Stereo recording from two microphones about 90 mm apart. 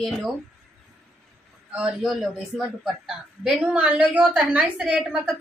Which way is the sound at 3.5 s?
15° right (ahead or behind).